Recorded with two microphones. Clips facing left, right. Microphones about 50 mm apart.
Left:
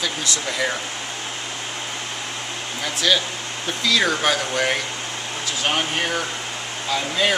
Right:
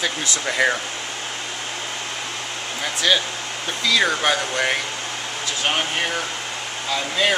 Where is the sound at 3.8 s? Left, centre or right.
Centre.